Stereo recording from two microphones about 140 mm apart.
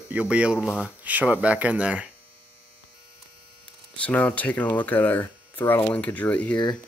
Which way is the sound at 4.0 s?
10° left (ahead or behind).